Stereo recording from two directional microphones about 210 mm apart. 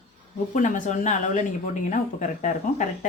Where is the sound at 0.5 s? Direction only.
35° left (ahead or behind).